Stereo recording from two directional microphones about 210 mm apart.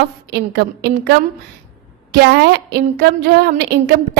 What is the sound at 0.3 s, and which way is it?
A woman's voice, 50° right (ahead or behind).